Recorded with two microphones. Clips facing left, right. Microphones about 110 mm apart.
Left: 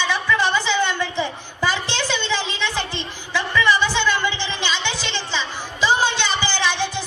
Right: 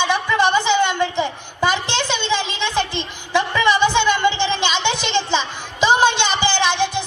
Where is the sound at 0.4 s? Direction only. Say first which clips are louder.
Right 4 dB; 20° right (ahead or behind).